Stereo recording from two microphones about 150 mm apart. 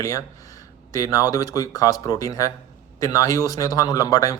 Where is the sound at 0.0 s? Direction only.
20° left (ahead or behind).